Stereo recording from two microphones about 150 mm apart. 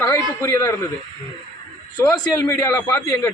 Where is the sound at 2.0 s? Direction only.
25° left (ahead or behind).